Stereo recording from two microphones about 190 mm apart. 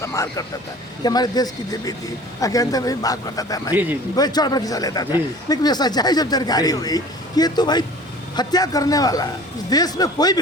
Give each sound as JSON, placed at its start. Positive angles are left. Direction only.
{"t": 0.0, "sound": "speech", "side_deg": 15}